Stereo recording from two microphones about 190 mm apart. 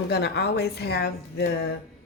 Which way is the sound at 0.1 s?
60° left (ahead or behind).